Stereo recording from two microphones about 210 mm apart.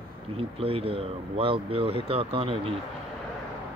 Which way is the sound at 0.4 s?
25° right (ahead or behind).